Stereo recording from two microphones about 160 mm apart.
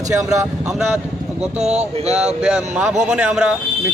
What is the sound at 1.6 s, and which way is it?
Speech, 45° right (ahead or behind).